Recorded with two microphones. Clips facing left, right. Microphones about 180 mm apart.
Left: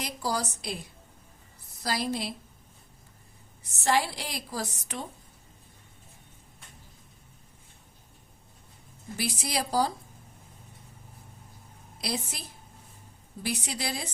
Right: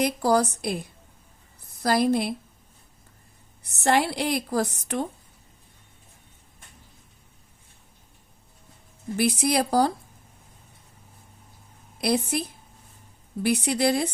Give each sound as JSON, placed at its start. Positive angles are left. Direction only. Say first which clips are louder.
{"t": 0.0, "sound": "a woman's voice", "louder": "right 10 dB", "side_deg": -55}
{"t": 1.8, "sound": "a woman's voice", "louder": "right 9 dB", "side_deg": -55}
{"t": 3.6, "sound": "a woman's voice", "louder": "right 4 dB", "side_deg": -60}
{"t": 9.1, "sound": "a woman's voice", "louder": "right 9 dB", "side_deg": -55}
{"t": 11.9, "sound": "a woman's voice", "louder": "right 10 dB", "side_deg": -55}